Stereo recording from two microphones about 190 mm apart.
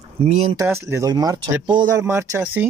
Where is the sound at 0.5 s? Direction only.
15° right (ahead or behind).